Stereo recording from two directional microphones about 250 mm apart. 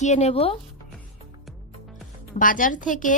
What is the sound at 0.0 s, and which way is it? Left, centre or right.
Speech, left.